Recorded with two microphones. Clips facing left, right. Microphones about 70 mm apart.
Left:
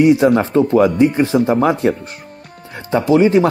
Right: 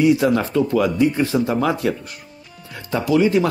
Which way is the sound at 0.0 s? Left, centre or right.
Left.